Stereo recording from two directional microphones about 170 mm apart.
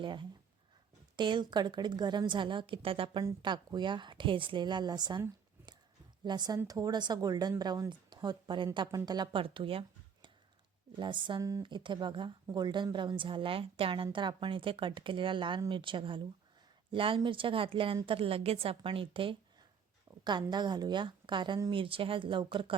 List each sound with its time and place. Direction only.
0.0 s speech: 30° right (ahead or behind)
6.2 s a woman's voice: 25° right (ahead or behind)
10.9 s a woman's voice: 30° right (ahead or behind)
20.1 s a sound: 15° right (ahead or behind)
20.5 s speech: 25° right (ahead or behind)